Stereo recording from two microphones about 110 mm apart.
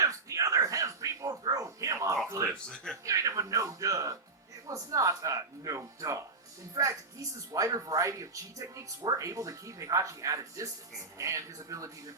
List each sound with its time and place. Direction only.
0.0 s music: 30° right (ahead or behind)
2.4 s a sound: 30° right (ahead or behind)
4.6 s speech: 30° right (ahead or behind)